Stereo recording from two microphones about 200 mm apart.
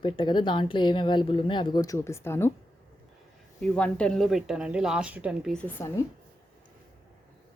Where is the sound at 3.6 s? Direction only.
5° left (ahead or behind).